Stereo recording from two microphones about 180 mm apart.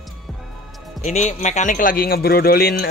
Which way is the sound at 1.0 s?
40° left (ahead or behind).